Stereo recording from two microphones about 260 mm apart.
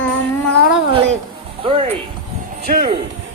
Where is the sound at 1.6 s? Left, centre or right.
Right.